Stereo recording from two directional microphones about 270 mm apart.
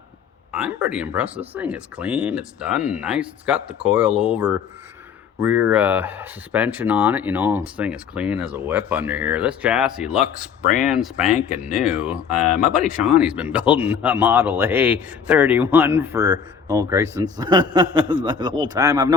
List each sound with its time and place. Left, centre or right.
0.5 s a man's voice: centre